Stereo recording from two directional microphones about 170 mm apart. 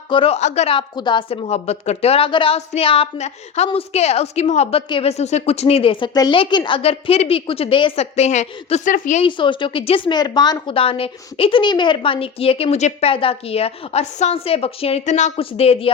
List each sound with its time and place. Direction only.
0.1 s a woman's voice: 35° left (ahead or behind); by 9.2 s 50° left (ahead or behind)
9.2 s a woman's voice: 30° left (ahead or behind)